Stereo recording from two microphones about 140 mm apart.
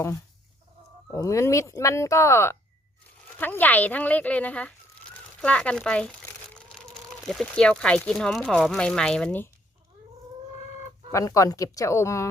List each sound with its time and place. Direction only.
1.1 s speech: 25° left (ahead or behind)
11.1 s speech: 20° left (ahead or behind)